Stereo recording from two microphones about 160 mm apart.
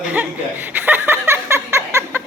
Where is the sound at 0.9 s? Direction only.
15° right (ahead or behind).